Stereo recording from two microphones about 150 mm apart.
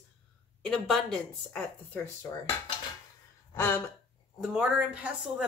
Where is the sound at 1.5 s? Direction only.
10° left (ahead or behind).